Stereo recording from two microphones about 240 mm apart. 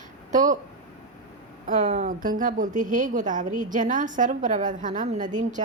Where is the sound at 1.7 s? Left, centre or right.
Right.